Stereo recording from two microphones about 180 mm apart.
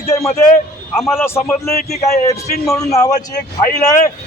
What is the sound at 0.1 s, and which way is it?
A man's voice, 15° left (ahead or behind).